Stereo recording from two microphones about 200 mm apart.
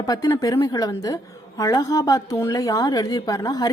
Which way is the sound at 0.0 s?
20° left (ahead or behind).